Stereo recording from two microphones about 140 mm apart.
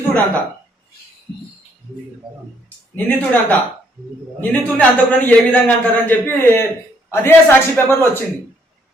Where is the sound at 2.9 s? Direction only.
10° left (ahead or behind).